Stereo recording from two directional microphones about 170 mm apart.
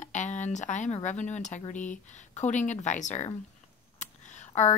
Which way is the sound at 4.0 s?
45° left (ahead or behind).